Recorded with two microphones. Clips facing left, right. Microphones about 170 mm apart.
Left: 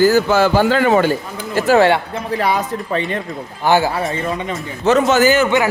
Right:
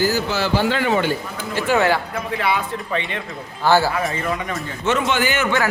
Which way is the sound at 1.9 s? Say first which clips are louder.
Left 4 dB; 25° left (ahead or behind).